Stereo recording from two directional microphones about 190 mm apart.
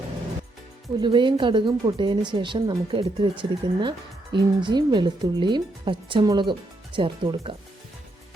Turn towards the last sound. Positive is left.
turn(degrees=-25)  # may be behind; listen again after turning